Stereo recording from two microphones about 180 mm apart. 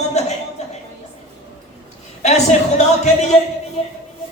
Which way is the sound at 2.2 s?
40° left (ahead or behind).